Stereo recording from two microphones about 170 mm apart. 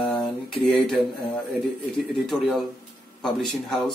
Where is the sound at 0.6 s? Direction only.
Centre (ahead or behind).